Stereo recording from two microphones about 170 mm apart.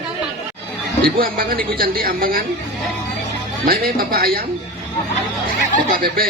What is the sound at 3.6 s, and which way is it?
Speech, 65° right (ahead or behind).